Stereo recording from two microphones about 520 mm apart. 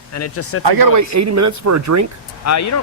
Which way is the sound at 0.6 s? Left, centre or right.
Right.